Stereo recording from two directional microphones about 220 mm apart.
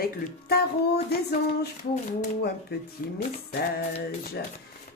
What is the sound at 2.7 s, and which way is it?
Speech, 45° left (ahead or behind).